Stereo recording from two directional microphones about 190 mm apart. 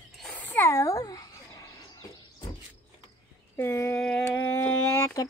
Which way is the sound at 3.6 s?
10° left (ahead or behind).